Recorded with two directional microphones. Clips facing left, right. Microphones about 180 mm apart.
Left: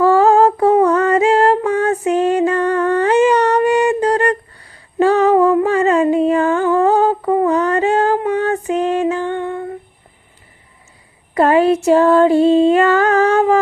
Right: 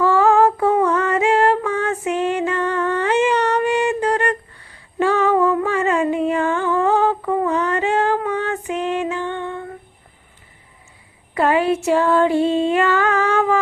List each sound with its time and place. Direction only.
0.0 s female singing: 40° left (ahead or behind)
5.6 s humming: 40° left (ahead or behind)
8.3 s female singing: 40° left (ahead or behind)
11.3 s female singing: 40° left (ahead or behind)